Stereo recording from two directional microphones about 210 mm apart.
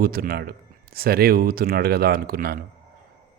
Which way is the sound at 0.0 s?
45° right (ahead or behind).